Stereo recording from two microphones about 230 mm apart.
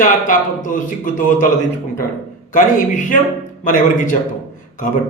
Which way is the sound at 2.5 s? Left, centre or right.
Left.